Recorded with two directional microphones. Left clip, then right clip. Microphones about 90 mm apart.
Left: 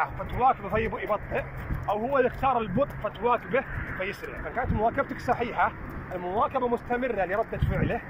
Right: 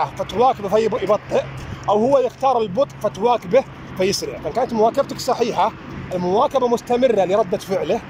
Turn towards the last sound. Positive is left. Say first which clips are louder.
# right 11 dB
turn(degrees=-60)  # may be behind; listen again after turning